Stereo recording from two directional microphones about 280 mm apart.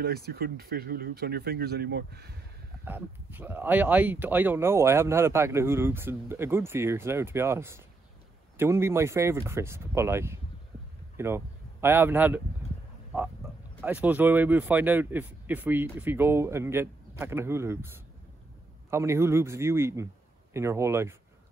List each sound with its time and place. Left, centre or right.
0.0 s speech: right
2.8 s speech: centre
13.7 s speech: centre